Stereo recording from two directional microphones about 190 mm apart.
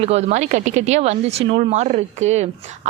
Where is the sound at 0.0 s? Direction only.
35° right (ahead or behind).